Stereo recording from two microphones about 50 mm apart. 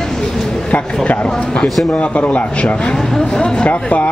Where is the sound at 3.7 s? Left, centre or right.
Left.